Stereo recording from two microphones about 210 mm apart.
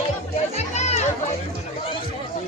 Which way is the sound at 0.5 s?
30° left (ahead or behind).